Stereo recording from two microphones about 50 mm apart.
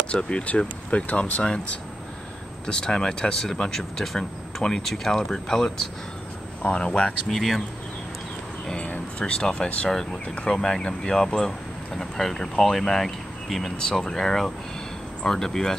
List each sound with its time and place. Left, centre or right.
0.1 s speech: left
1.4 s speech: centre
7.2 s speech: centre
8.6 s speech: left
9.8 s speech: centre
10.2 s speech: left
10.5 s speech: centre